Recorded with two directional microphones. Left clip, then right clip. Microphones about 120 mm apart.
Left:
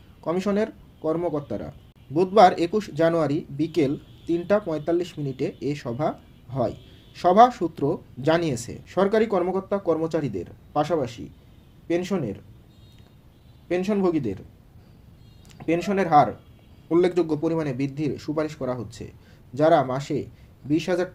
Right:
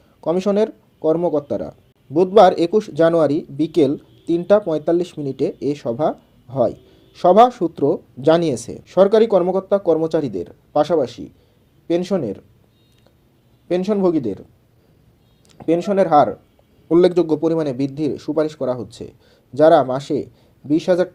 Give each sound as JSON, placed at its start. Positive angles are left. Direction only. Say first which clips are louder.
{"t": 0.2, "sound": "speech", "louder": "right 7 dB", "side_deg": -25}
{"t": 13.7, "sound": "speech", "louder": "right 6 dB", "side_deg": -25}
{"t": 15.4, "sound": "speech", "louder": "right 6 dB", "side_deg": -25}